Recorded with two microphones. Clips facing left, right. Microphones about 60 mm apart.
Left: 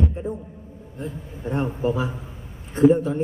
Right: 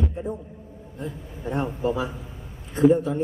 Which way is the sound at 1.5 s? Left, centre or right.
Left.